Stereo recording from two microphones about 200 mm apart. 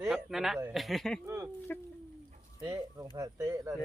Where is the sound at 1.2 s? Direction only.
15° right (ahead or behind).